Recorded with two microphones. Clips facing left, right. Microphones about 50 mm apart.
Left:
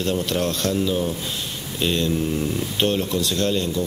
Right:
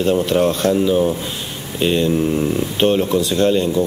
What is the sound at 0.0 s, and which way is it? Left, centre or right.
Speech, centre.